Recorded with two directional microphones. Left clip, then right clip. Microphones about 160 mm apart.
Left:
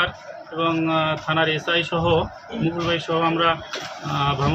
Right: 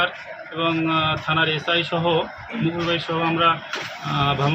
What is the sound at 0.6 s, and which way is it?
Speech, 5° left (ahead or behind).